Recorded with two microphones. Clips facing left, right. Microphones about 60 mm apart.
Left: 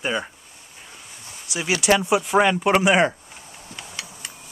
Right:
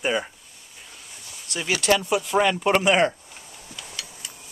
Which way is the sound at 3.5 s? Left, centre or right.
Left.